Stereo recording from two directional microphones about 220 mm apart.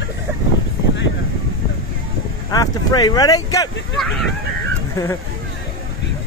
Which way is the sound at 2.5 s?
15° left (ahead or behind).